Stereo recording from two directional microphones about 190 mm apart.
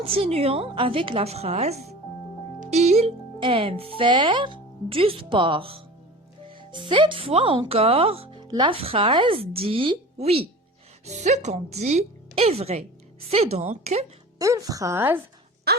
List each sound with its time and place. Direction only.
0.0 s a woman's voice: 30° right (ahead or behind)
14.3 s a woman's voice: 15° right (ahead or behind)
15.7 s a sound: 55° right (ahead or behind)